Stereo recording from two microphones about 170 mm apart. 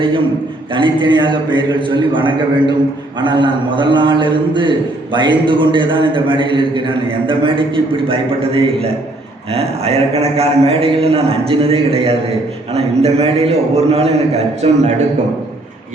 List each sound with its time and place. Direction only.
0.7 s a man's voice: 30° right (ahead or behind)